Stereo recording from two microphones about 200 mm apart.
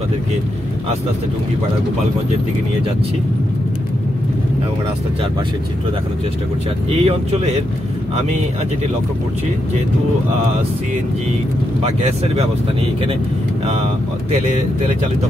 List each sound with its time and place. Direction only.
6.9 s speech: 30° right (ahead or behind)
11.8 s speech: 30° right (ahead or behind)